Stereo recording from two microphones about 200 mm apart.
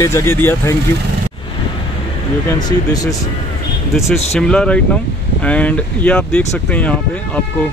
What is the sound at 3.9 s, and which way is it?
Speech, centre (ahead or behind).